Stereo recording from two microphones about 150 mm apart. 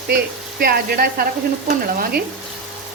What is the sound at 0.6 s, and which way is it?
Stir, 90° right.